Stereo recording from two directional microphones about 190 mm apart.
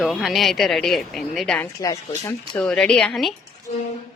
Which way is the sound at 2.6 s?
5° left (ahead or behind).